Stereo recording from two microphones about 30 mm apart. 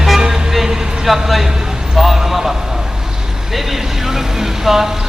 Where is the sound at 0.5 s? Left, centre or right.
Centre.